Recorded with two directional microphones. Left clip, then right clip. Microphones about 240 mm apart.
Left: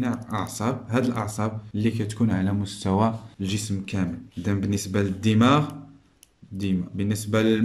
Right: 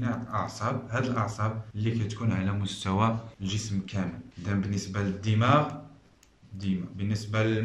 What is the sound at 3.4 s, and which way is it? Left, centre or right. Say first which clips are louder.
Speech: left 7 dB; left.